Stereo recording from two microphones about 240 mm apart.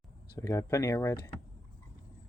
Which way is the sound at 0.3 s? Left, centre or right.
Centre.